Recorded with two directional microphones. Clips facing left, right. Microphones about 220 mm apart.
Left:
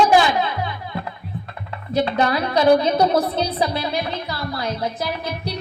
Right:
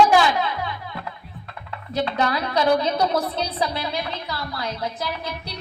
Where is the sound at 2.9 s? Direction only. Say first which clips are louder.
Left 4 dB; 30° left (ahead or behind).